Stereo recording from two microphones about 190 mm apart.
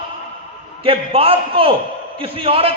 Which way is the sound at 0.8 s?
30° right (ahead or behind).